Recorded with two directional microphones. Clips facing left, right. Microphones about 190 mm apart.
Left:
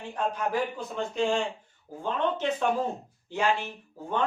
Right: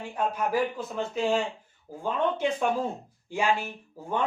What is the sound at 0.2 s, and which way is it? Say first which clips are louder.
Speech: right 2 dB; 10° right (ahead or behind).